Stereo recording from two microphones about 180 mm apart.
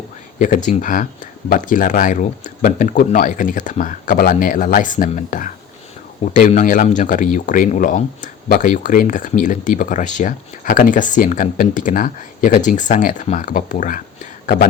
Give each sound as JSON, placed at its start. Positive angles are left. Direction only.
{"t": 0.3, "sound": "speech", "side_deg": 45}